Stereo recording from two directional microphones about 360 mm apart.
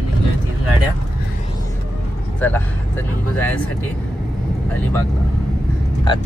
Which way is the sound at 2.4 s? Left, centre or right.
Centre.